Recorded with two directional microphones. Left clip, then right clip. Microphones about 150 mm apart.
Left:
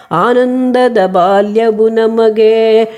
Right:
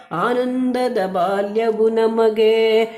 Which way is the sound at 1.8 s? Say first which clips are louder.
Left 6 dB; 35° left (ahead or behind).